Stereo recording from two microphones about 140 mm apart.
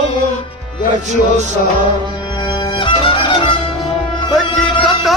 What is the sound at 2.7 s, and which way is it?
Music, 35° left (ahead or behind).